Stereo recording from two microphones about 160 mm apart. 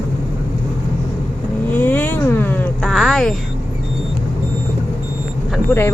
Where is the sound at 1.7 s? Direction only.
10° left (ahead or behind).